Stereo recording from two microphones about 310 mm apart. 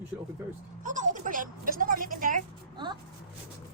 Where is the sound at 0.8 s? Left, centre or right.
Right.